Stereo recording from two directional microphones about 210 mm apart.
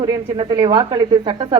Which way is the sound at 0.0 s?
20° right (ahead or behind).